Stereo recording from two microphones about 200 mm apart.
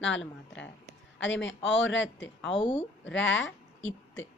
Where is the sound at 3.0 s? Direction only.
70° left (ahead or behind).